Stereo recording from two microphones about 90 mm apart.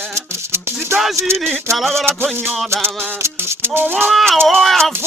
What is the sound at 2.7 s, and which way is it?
Music, 25° right (ahead or behind).